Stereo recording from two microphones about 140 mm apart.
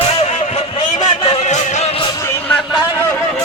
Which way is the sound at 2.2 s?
20° left (ahead or behind).